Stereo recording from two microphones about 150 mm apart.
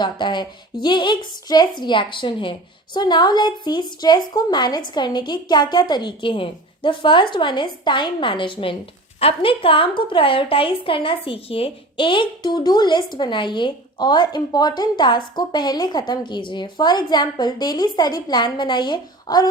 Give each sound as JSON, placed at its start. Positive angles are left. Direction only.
{"t": 0.0, "sound": "a woman's voice", "side_deg": 30}